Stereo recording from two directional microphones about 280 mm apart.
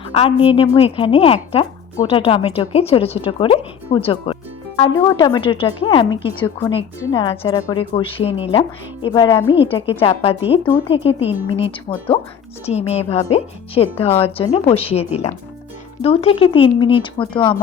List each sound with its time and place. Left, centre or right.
0.1 s a woman's voice: left